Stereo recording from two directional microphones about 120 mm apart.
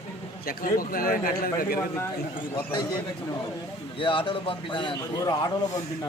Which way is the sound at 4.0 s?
45° left (ahead or behind).